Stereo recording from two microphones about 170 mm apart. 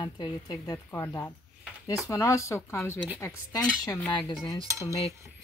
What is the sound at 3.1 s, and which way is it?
Speech, 15° left (ahead or behind).